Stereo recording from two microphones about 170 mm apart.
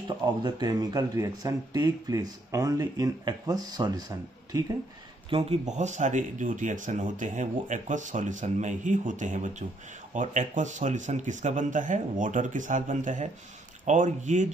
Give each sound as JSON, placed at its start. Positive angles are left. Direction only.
{"t": 0.2, "sound": "speech", "side_deg": -25}
{"t": 5.3, "sound": "speech", "side_deg": -35}